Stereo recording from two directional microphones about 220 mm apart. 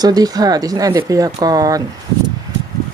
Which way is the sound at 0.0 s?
15° right (ahead or behind).